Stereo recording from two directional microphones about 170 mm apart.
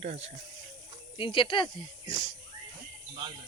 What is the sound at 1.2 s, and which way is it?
Speech, 30° left (ahead or behind).